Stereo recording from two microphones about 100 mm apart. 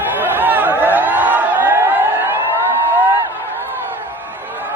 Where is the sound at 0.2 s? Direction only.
20° right (ahead or behind).